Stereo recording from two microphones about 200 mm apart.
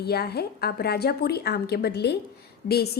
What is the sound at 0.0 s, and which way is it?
A woman's voice, 55° left (ahead or behind).